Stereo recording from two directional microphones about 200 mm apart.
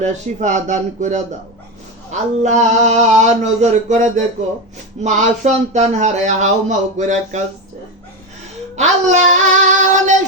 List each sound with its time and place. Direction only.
0.0 s speech: 35° right (ahead or behind)
2.4 s speech: 35° right (ahead or behind)
8.7 s female singing: 35° right (ahead or behind)